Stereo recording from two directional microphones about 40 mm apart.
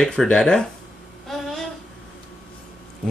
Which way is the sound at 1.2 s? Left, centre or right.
Centre.